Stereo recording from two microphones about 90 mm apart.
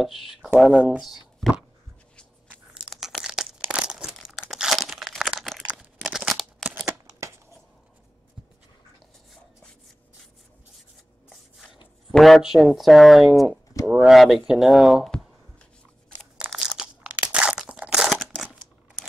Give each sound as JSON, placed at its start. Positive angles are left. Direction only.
{"t": 0.0, "sound": "speech", "side_deg": 0}
{"t": 2.9, "sound": "crumpling", "side_deg": 0}
{"t": 5.7, "sound": "crunch", "side_deg": -5}
{"t": 7.1, "sound": "shuffling cards", "side_deg": -35}
{"t": 12.1, "sound": "speech", "side_deg": 0}
{"t": 16.3, "sound": "crunch", "side_deg": -5}
{"t": 18.1, "sound": "crumpling", "side_deg": 5}